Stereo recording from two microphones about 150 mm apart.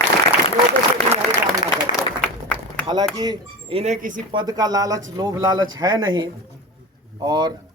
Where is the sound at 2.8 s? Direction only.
25° right (ahead or behind).